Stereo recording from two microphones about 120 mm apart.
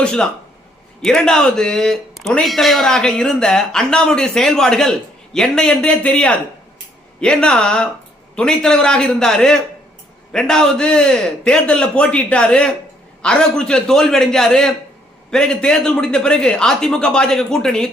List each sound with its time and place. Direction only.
0.0 s a man's voice: 5° left (ahead or behind)